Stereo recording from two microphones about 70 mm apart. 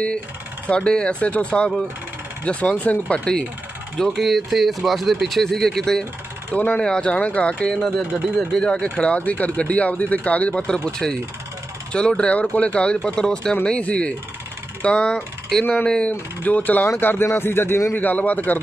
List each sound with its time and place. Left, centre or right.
0.7 s speech: centre
4.2 s speech: centre
6.5 s a man's voice: left
17.9 s speech: left